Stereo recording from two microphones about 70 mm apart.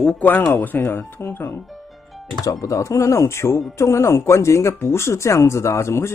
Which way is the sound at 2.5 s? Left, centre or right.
Left.